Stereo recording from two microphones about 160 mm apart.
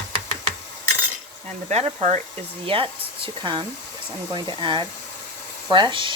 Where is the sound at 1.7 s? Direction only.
40° right (ahead or behind).